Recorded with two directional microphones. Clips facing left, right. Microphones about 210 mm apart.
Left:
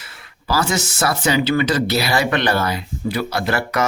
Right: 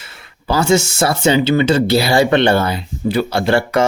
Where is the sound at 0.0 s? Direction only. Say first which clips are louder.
Right 2 dB; 25° right (ahead or behind).